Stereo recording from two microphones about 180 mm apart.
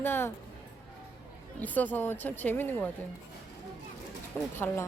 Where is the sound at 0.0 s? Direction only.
10° left (ahead or behind).